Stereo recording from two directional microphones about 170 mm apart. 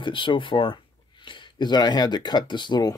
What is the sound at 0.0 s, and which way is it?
Speech, 30° left (ahead or behind).